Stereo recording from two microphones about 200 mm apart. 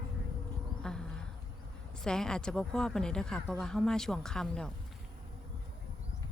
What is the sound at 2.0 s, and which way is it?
A woman's voice, 5° left (ahead or behind).